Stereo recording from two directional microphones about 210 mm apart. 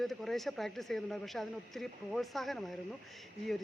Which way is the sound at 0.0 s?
Centre (ahead or behind).